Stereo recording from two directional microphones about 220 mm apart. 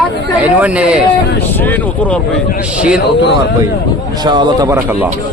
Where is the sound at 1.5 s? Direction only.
10° left (ahead or behind).